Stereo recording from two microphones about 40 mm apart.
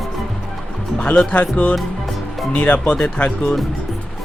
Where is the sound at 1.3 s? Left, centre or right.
Left.